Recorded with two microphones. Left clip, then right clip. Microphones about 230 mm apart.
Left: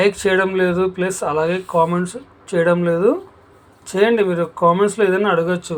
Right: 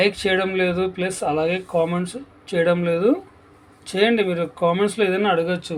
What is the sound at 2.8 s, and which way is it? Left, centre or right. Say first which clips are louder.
Speech: left 3 dB; centre.